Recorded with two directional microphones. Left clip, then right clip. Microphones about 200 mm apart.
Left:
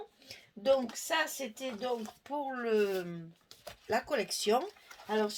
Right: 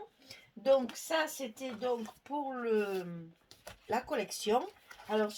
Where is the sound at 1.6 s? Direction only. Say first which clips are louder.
Right 1 dB; 40° left (ahead or behind).